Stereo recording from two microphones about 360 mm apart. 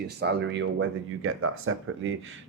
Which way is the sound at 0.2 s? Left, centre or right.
Right.